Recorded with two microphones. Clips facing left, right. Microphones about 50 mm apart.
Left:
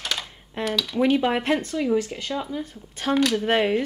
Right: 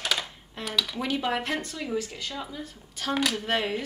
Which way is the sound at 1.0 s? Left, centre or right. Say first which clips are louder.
Left 10 dB; centre.